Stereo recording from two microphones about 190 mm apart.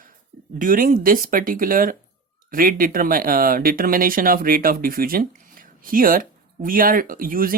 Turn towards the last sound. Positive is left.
turn(degrees=-50)  # may be behind; listen again after turning